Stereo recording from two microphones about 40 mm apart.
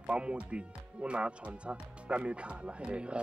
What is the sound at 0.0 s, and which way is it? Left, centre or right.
Speech, right.